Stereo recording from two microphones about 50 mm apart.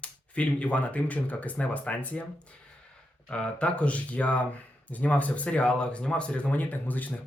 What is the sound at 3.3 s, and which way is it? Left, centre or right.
Speech, left.